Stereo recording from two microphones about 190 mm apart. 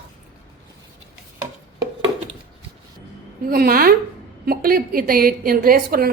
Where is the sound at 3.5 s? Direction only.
50° right (ahead or behind).